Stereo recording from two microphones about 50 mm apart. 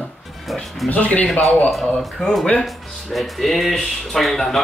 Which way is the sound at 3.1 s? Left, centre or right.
Centre.